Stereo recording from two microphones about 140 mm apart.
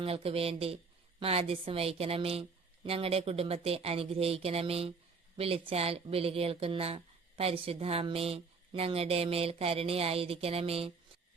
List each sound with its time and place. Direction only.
0.0 s speech: 45° right (ahead or behind)